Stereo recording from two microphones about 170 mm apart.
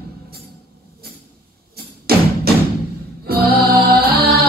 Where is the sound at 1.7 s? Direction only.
65° right (ahead or behind).